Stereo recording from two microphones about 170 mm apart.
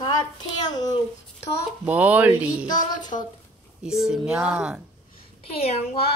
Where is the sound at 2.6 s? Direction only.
25° left (ahead or behind).